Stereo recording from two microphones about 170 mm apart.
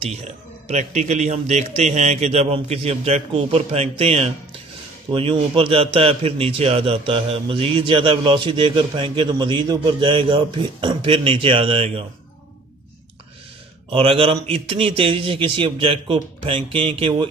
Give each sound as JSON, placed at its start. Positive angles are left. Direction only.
{"t": 0.0, "sound": "a man's voice", "side_deg": -40}
{"t": 13.8, "sound": "a man's voice", "side_deg": -30}